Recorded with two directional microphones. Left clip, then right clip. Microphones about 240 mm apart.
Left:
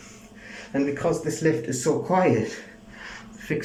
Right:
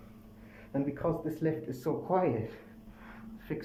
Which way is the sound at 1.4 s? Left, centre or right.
Centre.